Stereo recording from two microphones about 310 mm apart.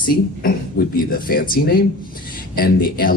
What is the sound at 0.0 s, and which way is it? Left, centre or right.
Speech, left.